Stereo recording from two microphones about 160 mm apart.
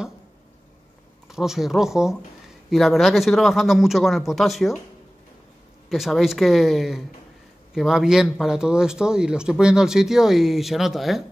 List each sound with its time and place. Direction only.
1.3 s speech: centre (ahead or behind)
5.9 s speech: centre (ahead or behind)